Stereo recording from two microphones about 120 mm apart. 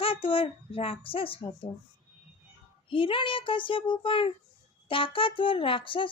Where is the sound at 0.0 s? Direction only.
50° left (ahead or behind).